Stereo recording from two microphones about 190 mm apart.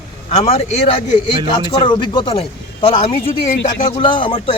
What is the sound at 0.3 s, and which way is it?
A man's voice, 35° left (ahead or behind).